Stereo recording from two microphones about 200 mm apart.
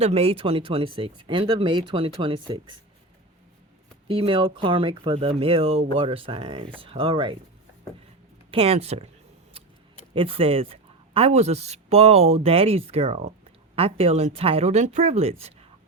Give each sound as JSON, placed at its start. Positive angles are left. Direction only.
{"t": 0.0, "sound": "speech", "side_deg": -30}
{"t": 4.1, "sound": "speech", "side_deg": -25}
{"t": 8.4, "sound": "speech", "side_deg": -30}
{"t": 10.2, "sound": "speech", "side_deg": -30}